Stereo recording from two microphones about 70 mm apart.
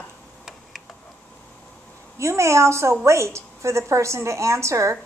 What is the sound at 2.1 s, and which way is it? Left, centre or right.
A woman's voice, right.